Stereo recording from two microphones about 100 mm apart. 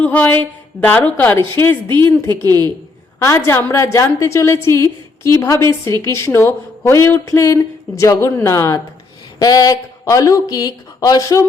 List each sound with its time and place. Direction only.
0.0 s a woman's voice: 15° left (ahead or behind)
2.3 s a woman's voice: 40° right (ahead or behind)
3.2 s a woman's voice: 30° left (ahead or behind)